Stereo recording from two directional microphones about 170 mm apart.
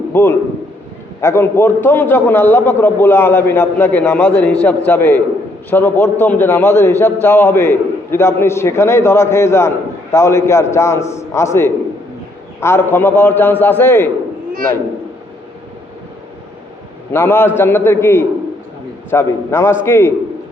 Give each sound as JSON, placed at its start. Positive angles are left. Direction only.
{"t": 0.1, "sound": "a man's voice", "side_deg": 10}
{"t": 17.1, "sound": "a man's voice", "side_deg": 10}